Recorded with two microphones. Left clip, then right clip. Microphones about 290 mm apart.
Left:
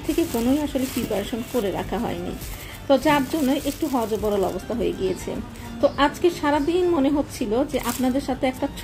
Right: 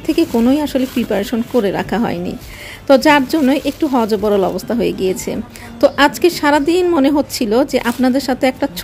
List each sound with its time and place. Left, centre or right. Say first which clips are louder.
0.1 s speech: right 8 dB; right